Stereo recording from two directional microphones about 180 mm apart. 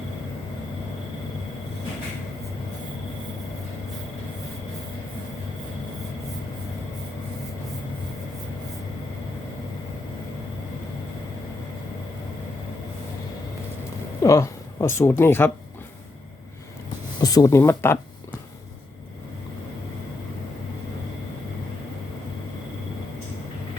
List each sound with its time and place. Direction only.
14.2 s speech: 15° left (ahead or behind)
17.2 s speech: 20° left (ahead or behind)